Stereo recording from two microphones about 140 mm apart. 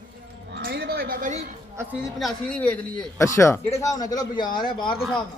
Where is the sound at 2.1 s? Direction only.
5° left (ahead or behind).